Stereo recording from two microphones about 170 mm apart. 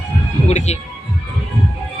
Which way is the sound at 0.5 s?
40° left (ahead or behind).